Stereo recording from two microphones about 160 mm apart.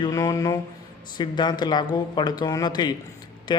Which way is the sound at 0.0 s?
20° left (ahead or behind).